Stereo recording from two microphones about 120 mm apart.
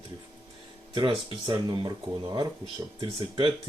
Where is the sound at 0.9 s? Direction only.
40° right (ahead or behind).